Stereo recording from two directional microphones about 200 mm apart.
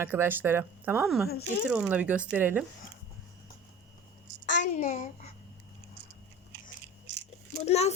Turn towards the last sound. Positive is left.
turn(degrees=35)  # may be behind; listen again after turning